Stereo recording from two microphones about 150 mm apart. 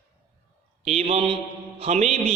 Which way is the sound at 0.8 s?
45° right (ahead or behind).